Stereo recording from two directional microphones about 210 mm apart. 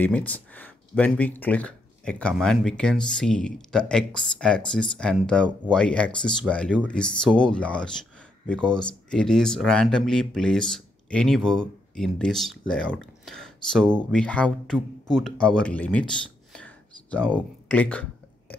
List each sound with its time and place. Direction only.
0.0 s speech: 5° left (ahead or behind)